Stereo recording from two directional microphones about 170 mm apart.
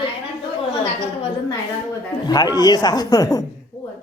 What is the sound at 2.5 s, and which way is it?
Speech, 25° left (ahead or behind).